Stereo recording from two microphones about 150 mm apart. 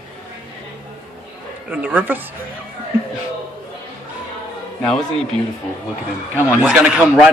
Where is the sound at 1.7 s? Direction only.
10° right (ahead or behind).